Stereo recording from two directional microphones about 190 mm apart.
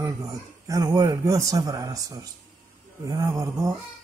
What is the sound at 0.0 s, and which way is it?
Speech, 20° right (ahead or behind).